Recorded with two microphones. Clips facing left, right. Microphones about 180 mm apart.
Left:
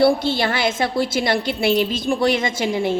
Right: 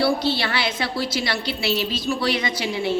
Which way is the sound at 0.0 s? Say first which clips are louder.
Left 4 dB; 50° left (ahead or behind).